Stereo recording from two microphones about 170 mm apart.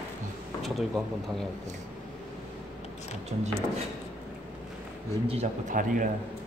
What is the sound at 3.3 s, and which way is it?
Speech, 45° right (ahead or behind).